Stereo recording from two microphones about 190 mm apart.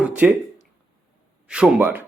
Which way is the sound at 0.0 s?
10° right (ahead or behind).